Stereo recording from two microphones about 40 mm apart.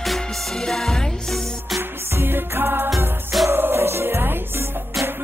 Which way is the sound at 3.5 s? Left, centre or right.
Right.